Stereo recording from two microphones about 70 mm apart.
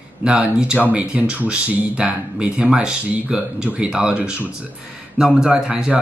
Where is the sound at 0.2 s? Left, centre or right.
Centre.